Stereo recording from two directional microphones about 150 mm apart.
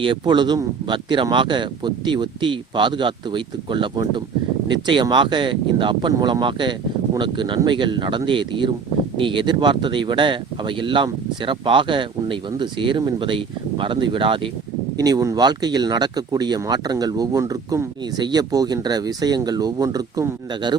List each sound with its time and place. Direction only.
0.0 s speech: 30° right (ahead or behind)